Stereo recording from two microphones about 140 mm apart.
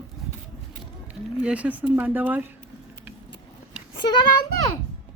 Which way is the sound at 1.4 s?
10° right (ahead or behind).